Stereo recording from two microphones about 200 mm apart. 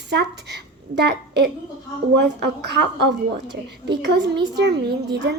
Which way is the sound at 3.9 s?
55° right (ahead or behind).